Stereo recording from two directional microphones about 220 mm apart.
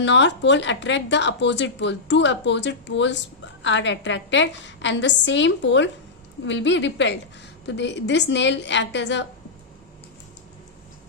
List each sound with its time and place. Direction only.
0.0 s a woman's voice: 55° left (ahead or behind)